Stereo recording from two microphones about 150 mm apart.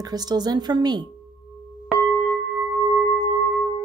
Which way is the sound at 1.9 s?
Centre (ahead or behind).